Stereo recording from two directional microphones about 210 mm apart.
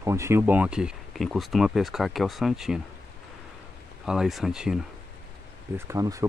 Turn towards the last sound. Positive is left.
turn(degrees=-15)  # may be behind; listen again after turning